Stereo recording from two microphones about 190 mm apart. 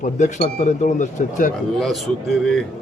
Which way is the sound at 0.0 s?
40° left (ahead or behind).